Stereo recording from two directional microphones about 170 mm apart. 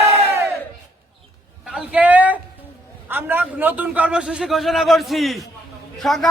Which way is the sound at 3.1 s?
10° right (ahead or behind).